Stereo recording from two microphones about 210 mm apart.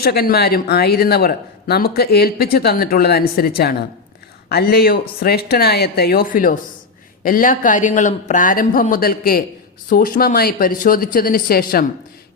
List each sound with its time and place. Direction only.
0.0 s speech: 45° left (ahead or behind)